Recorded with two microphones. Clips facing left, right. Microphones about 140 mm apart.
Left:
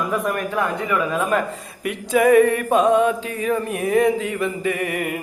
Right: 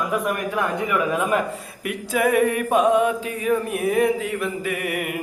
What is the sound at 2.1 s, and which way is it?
Mantra, 5° right (ahead or behind).